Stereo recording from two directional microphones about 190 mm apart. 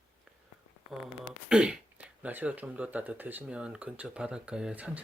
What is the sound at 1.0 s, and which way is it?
Speech, 5° right (ahead or behind).